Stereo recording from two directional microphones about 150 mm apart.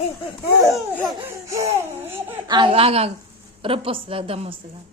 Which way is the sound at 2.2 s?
25° right (ahead or behind).